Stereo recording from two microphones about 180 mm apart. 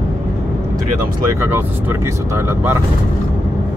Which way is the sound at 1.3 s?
15° right (ahead or behind).